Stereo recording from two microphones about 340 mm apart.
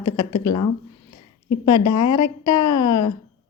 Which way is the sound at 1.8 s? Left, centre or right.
Left.